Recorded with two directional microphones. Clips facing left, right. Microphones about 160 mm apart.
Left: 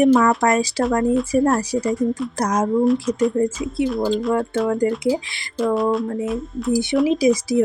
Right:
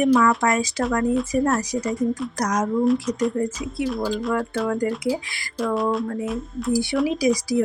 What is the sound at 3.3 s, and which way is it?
Speech, 25° left (ahead or behind).